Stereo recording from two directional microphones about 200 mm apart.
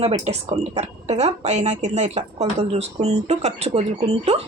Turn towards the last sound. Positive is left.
turn(degrees=-30)  # may be behind; listen again after turning